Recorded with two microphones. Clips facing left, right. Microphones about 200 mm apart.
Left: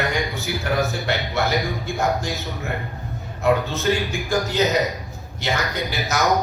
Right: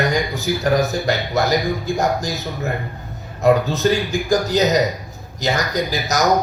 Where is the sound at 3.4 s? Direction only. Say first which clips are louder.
Right 5 dB; 40° right (ahead or behind).